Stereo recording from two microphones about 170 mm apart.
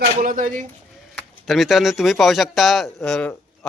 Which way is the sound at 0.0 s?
55° right (ahead or behind).